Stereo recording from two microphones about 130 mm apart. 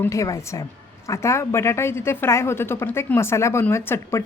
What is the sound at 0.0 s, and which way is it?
A woman's voice, 25° left (ahead or behind).